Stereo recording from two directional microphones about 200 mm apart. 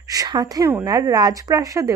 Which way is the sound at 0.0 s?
20° right (ahead or behind).